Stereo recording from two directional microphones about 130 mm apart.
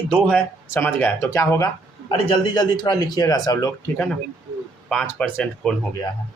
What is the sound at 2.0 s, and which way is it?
A man's voice, 45° left (ahead or behind).